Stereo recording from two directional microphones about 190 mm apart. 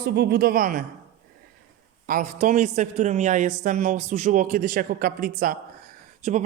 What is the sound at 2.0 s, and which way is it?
A man's voice, 45° right (ahead or behind).